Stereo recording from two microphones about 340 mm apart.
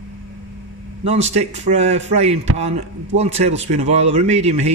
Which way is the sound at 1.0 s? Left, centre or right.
Centre.